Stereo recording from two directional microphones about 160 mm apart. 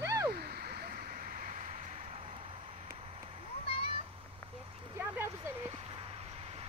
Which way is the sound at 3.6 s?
35° left (ahead or behind).